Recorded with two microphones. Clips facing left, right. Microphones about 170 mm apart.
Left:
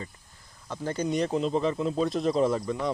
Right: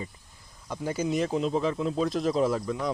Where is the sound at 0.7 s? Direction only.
10° right (ahead or behind).